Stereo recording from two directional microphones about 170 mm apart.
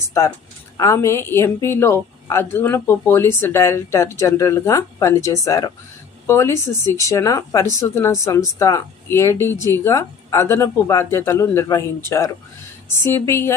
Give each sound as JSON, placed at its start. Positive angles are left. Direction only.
{"t": 0.0, "sound": "a woman's voice", "side_deg": 15}